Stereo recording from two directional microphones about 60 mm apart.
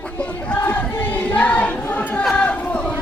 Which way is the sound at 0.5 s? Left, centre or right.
Left.